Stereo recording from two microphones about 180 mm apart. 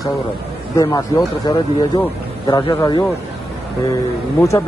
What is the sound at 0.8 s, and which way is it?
Speech, 20° left (ahead or behind).